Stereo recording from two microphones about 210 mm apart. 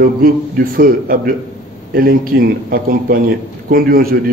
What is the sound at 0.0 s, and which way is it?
A man's voice, 45° right (ahead or behind).